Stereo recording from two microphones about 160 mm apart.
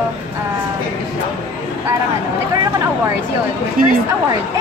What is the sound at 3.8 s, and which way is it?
Speech, 60° right (ahead or behind).